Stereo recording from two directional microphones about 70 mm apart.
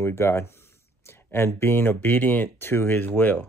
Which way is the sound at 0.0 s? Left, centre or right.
Left.